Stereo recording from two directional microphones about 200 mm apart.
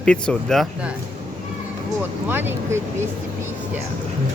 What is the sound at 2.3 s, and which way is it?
Speech, 10° right (ahead or behind).